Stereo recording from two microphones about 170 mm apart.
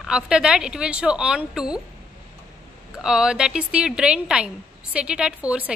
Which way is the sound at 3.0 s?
5° right (ahead or behind).